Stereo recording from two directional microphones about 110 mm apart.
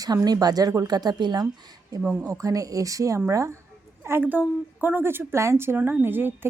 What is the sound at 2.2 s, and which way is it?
A woman's voice, 30° right (ahead or behind).